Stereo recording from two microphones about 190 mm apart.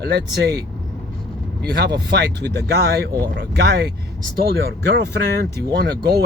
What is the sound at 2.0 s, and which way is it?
Speech, 60° right (ahead or behind).